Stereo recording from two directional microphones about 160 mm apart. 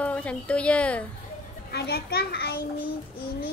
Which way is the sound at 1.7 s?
85° left.